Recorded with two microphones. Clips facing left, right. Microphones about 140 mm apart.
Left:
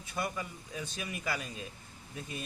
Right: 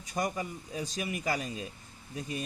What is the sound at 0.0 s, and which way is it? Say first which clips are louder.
Speech: right 4 dB; 40° right (ahead or behind).